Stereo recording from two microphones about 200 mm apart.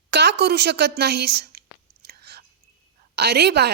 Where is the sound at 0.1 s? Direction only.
55° right (ahead or behind).